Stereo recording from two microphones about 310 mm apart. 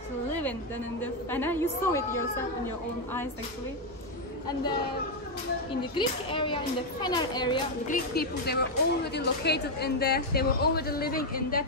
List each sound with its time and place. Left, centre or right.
0.3 s a sound: centre
1.0 s a child's voice: centre
5.8 s a child's voice: centre
7.9 s speech: left